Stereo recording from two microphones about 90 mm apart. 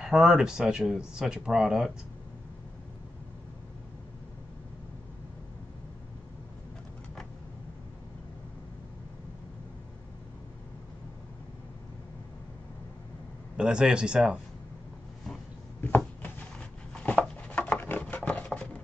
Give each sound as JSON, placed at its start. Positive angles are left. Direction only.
{"t": 0.0, "sound": "speech", "side_deg": -5}
{"t": 13.6, "sound": "speech", "side_deg": -10}
{"t": 15.8, "sound": "a sound", "side_deg": 20}